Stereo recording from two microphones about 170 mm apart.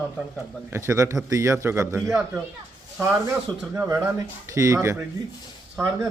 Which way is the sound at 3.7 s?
20° right (ahead or behind).